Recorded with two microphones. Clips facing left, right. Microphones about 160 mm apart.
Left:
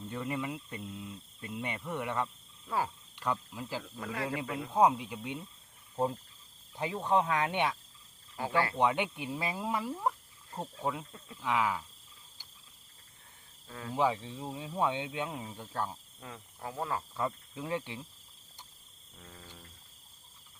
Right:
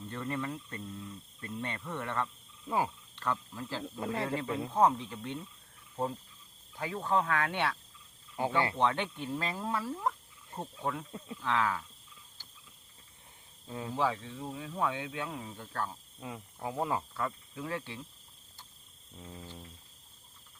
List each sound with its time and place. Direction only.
0.1 s speech: 10° left (ahead or behind)
2.6 s speech: 20° right (ahead or behind)
3.2 s speech: 10° left (ahead or behind)
3.8 s speech: 25° right (ahead or behind)
4.7 s speech: 10° left (ahead or behind)
6.7 s speech: 20° left (ahead or behind)
8.4 s speech: 20° right (ahead or behind)
8.8 s speech: 15° left (ahead or behind)
13.7 s speech: 20° right (ahead or behind)
13.9 s speech: 15° left (ahead or behind)
16.2 s speech: 15° right (ahead or behind)
17.2 s speech: 20° left (ahead or behind)
19.2 s speech: 20° right (ahead or behind)